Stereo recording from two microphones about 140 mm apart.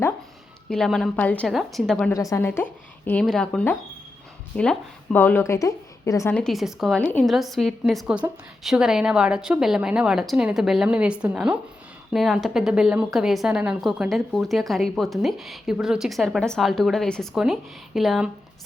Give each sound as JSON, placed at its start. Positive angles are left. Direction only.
{"t": 0.7, "sound": "speech", "side_deg": 5}
{"t": 2.1, "sound": "a woman's voice", "side_deg": 20}
{"t": 3.2, "sound": "a woman's voice", "side_deg": 5}
{"t": 6.3, "sound": "speech", "side_deg": 0}